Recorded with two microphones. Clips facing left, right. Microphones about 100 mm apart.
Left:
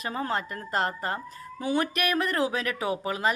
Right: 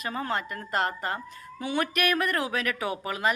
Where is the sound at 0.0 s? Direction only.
35° left (ahead or behind).